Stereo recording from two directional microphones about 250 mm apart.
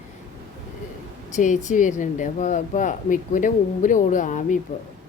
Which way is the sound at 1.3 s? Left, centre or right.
Left.